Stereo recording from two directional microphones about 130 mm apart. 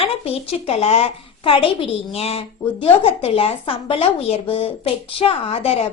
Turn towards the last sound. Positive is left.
turn(degrees=50)  # may be behind; listen again after turning